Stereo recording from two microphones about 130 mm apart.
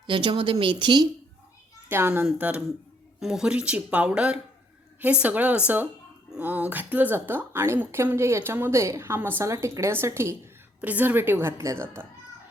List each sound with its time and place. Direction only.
0.1 s a woman's voice: 40° right (ahead or behind)
1.9 s a woman's voice: 15° right (ahead or behind)